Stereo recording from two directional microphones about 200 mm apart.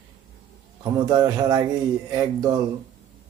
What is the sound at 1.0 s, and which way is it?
A man's voice, 20° right (ahead or behind).